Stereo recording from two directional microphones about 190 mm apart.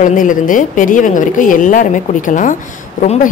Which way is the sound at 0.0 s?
45° left (ahead or behind).